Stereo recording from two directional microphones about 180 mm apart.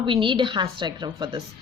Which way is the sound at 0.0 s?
25° right (ahead or behind).